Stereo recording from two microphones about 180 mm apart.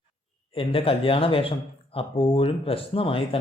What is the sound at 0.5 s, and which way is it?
Speech, 30° left (ahead or behind).